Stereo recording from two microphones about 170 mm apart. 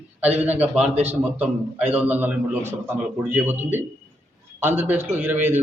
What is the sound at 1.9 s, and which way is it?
A man's voice, 10° right (ahead or behind).